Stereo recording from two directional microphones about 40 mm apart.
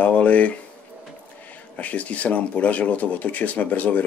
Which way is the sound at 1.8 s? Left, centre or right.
Left.